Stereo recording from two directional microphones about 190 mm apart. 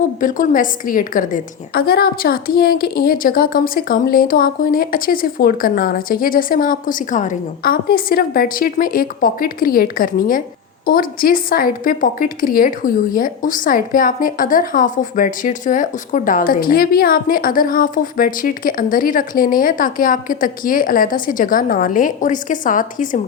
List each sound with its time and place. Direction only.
0.2 s a woman's voice: 45° left (ahead or behind)